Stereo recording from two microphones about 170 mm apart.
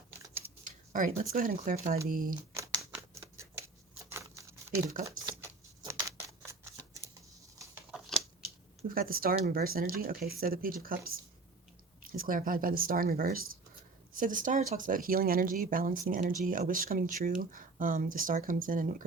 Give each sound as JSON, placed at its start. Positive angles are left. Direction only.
{"t": 0.9, "sound": "speech", "side_deg": -50}
{"t": 2.6, "sound": "scissors", "side_deg": -15}
{"t": 4.1, "sound": "a sound", "side_deg": -20}
{"t": 5.0, "sound": "scissors", "side_deg": -20}
{"t": 7.9, "sound": "a sound", "side_deg": 0}
{"t": 9.0, "sound": "speech", "side_deg": -60}